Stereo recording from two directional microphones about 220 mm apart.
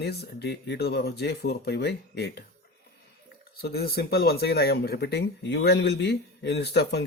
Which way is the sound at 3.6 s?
45° left (ahead or behind).